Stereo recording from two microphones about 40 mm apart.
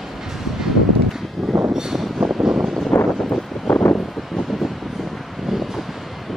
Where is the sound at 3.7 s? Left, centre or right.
Left.